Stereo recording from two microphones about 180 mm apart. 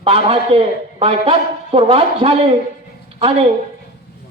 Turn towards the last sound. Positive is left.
turn(degrees=-35)  # may be behind; listen again after turning